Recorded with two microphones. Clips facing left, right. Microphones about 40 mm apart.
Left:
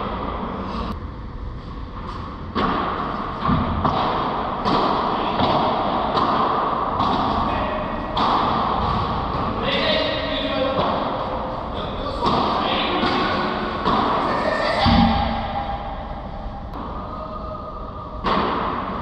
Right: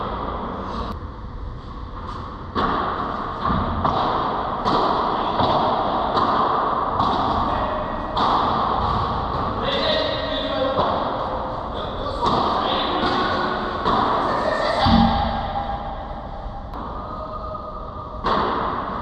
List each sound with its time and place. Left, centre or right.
0.0 s vehicle: left
0.6 s vehicle: left
2.5 s thump: left
7.1 s a sound: left
18.2 s thump: left